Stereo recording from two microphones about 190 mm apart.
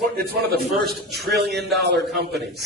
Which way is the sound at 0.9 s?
60° right (ahead or behind).